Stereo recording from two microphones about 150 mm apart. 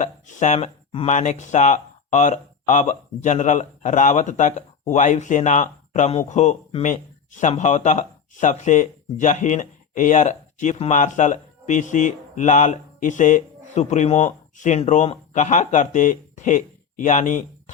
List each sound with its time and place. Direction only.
0.0 s speech: 55° left (ahead or behind)